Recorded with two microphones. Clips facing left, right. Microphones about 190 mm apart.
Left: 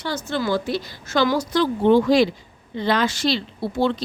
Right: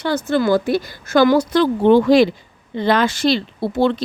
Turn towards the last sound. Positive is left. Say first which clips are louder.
# right 4 dB
turn(degrees=-60)  # may be behind; listen again after turning